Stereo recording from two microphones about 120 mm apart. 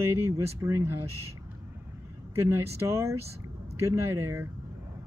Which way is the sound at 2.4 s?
20° right (ahead or behind).